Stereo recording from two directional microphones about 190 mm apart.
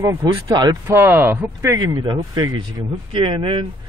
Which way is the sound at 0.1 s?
20° right (ahead or behind).